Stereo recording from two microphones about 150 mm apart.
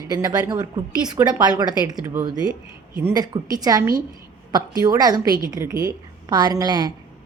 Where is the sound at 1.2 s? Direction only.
15° right (ahead or behind).